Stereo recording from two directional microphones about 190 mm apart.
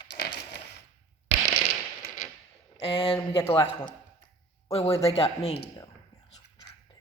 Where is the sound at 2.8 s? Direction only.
30° left (ahead or behind).